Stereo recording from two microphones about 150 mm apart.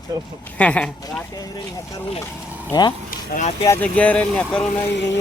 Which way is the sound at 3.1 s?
60° left (ahead or behind).